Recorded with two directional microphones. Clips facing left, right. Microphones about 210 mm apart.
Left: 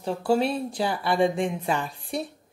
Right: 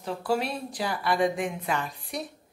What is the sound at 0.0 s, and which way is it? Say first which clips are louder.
Speech: left 5 dB; 30° left (ahead or behind).